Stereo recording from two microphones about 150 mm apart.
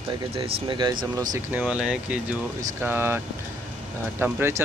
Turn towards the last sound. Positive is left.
turn(degrees=-15)  # may be behind; listen again after turning